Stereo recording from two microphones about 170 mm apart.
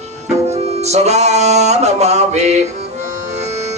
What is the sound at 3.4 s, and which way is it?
Music, 40° right (ahead or behind).